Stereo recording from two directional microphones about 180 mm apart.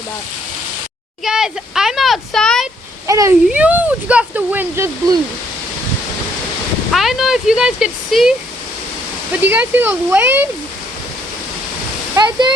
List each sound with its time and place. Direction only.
1.2 s a child's voice: 5° right (ahead or behind)
3.1 s speech: 15° right (ahead or behind)
6.9 s a child's voice: centre (ahead or behind)
9.4 s speech: 10° right (ahead or behind)
12.2 s speech: 20° right (ahead or behind)